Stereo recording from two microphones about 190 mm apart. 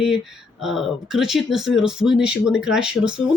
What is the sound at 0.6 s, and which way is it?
Speech, centre (ahead or behind).